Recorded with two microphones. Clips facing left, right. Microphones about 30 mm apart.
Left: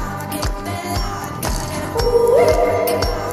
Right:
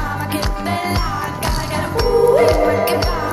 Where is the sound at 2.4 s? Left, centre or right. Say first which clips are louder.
Even; right.